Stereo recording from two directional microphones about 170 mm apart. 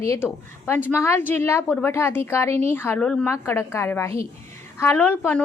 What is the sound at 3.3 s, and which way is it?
A woman's voice, 15° left (ahead or behind).